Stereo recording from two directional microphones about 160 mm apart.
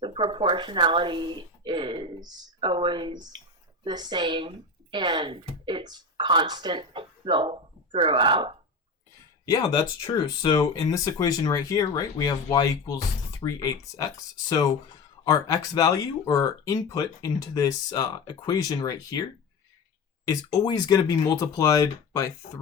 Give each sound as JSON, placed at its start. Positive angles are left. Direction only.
{"t": 0.0, "sound": "speech", "side_deg": -30}
{"t": 10.1, "sound": "speech", "side_deg": 30}
{"t": 15.2, "sound": "speech", "side_deg": 25}
{"t": 20.2, "sound": "speech", "side_deg": 25}